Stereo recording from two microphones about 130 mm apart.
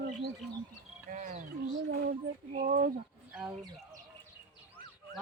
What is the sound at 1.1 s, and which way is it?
Speech, 90° right.